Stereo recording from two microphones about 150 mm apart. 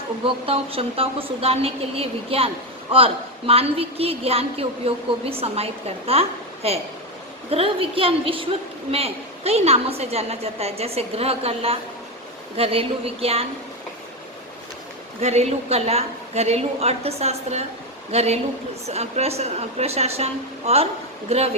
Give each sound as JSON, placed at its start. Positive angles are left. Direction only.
{"t": 0.4, "sound": "a woman's voice", "side_deg": -40}
{"t": 15.2, "sound": "a woman's voice", "side_deg": -45}